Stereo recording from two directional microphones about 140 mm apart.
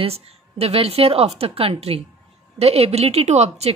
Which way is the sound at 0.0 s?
45° right (ahead or behind).